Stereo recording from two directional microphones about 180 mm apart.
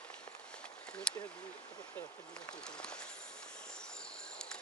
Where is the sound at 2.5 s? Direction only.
5° left (ahead or behind).